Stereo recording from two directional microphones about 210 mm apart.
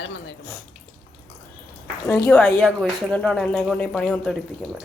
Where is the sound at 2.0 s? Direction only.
10° left (ahead or behind).